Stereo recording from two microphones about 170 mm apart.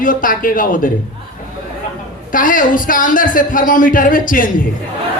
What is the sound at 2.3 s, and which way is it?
Speech, 50° left (ahead or behind).